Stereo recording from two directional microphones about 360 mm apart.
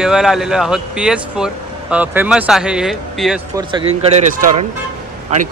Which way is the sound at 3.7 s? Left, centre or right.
Centre.